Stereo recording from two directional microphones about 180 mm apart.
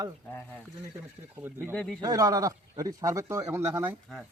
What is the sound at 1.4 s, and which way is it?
Speech, 10° right (ahead or behind).